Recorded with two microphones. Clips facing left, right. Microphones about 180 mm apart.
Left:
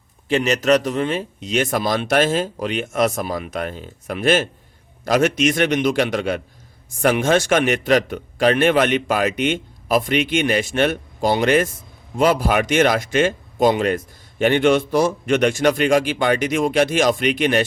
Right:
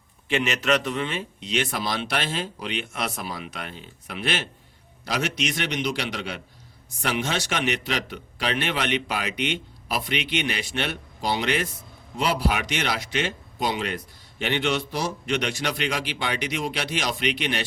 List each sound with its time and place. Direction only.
0.3 s speech: 40° left (ahead or behind)